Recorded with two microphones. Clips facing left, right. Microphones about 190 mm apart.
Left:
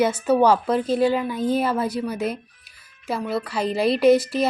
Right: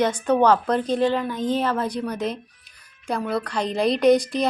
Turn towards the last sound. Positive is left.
turn(degrees=5)  # may be behind; listen again after turning